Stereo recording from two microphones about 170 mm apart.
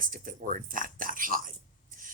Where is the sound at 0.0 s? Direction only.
55° right (ahead or behind).